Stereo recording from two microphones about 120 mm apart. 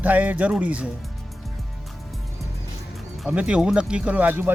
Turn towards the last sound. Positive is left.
turn(degrees=-15)  # may be behind; listen again after turning